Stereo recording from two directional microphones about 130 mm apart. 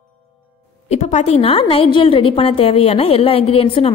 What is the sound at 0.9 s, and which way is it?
A woman's voice, 65° left (ahead or behind).